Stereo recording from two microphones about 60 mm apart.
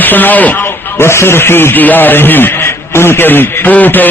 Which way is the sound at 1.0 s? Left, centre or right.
Left.